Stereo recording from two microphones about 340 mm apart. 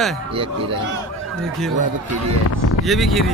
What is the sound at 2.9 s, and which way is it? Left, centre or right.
Speech, centre.